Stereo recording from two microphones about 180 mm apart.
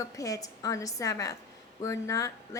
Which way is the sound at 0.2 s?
20° left (ahead or behind).